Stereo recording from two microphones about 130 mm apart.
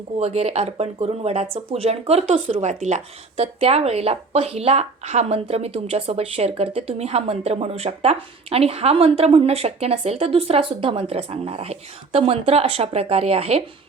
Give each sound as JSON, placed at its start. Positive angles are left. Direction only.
{"t": 0.2, "sound": "speech", "side_deg": -55}
{"t": 3.3, "sound": "speech", "side_deg": -50}